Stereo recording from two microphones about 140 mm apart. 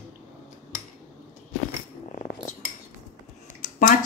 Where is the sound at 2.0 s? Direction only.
80° left.